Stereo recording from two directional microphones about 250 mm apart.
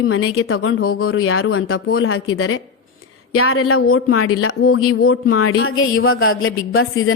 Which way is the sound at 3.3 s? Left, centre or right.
Left.